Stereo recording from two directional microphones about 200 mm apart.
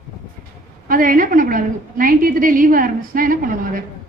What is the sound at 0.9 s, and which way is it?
A woman's voice, 45° right (ahead or behind).